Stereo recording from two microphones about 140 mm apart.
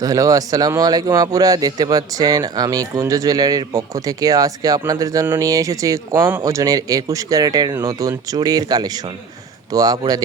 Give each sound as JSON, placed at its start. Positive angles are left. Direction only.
{"t": 0.0, "sound": "a man's voice", "side_deg": -25}